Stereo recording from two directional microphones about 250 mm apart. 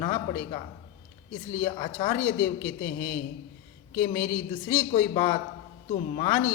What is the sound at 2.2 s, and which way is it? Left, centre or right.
Speech, left.